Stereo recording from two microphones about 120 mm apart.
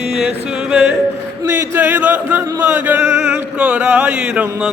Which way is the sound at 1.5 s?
20° right (ahead or behind).